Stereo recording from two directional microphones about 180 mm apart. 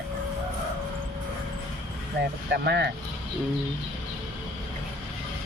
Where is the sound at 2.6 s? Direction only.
70° right (ahead or behind).